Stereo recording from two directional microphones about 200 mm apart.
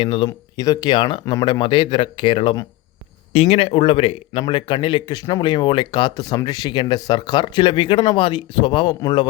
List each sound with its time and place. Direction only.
0.0 s a man's voice: 25° left (ahead or behind)